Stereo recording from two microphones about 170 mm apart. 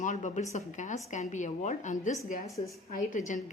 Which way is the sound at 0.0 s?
45° left (ahead or behind).